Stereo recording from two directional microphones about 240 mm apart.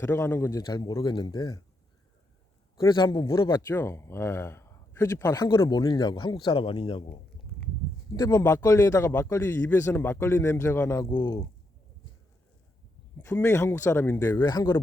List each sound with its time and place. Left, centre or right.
0.0 s speech: centre
2.7 s speech: centre
13.1 s speech: centre